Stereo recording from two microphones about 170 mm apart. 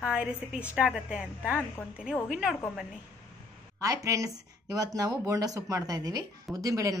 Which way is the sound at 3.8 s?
20° right (ahead or behind).